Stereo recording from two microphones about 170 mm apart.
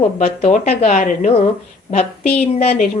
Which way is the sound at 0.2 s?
45° left (ahead or behind).